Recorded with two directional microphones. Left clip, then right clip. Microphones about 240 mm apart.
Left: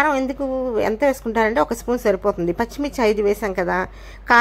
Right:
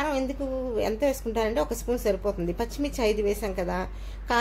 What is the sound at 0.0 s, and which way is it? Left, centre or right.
A woman's voice, centre.